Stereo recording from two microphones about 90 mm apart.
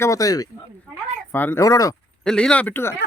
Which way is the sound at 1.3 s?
20° left (ahead or behind).